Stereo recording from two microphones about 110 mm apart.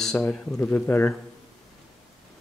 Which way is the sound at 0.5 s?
15° left (ahead or behind).